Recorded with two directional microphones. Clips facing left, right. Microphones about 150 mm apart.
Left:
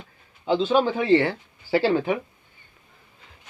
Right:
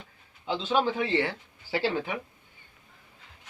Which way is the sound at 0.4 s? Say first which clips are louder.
Left 6 dB; 45° left (ahead or behind).